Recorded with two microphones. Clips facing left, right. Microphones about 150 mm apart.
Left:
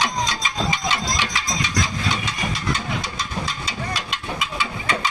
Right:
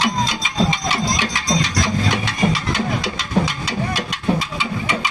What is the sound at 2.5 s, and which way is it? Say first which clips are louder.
Engine: right 5 dB; 80° right.